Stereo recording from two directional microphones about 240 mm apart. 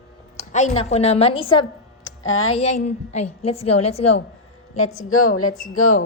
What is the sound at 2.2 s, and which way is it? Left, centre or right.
Speech, left.